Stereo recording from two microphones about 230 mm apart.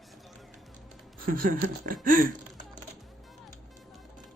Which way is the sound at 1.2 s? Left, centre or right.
Right.